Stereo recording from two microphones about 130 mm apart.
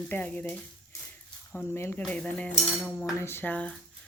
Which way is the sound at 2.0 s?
10° left (ahead or behind).